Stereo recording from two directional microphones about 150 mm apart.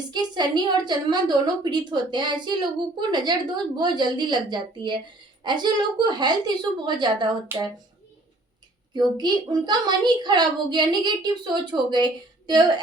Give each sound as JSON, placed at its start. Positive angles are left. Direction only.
{"t": 0.1, "sound": "a woman's voice", "side_deg": -30}
{"t": 8.9, "sound": "a woman's voice", "side_deg": -30}